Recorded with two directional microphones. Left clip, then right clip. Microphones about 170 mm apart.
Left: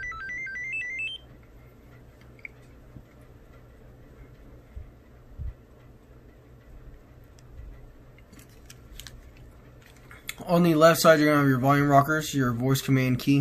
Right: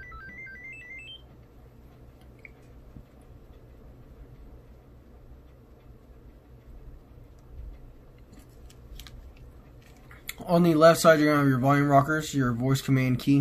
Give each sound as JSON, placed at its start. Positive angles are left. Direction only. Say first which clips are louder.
{"t": 0.0, "sound": "music", "louder": "left 9 dB", "side_deg": 25}
{"t": 10.0, "sound": "speech", "louder": "left 1 dB", "side_deg": 5}